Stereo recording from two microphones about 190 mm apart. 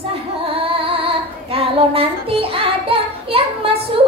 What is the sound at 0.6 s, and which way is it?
Child singing, 30° right (ahead or behind).